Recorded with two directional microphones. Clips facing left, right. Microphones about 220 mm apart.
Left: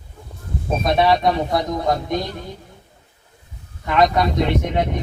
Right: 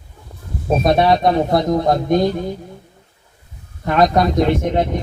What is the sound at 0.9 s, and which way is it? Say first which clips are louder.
Speech: right 2 dB; 45° right (ahead or behind).